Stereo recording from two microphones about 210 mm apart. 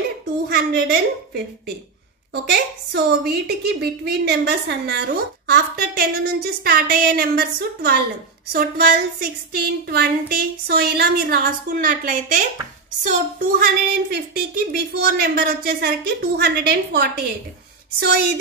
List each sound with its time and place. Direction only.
0.5 s a woman's voice: 50° right (ahead or behind)
2.4 s a woman's voice: 50° right (ahead or behind)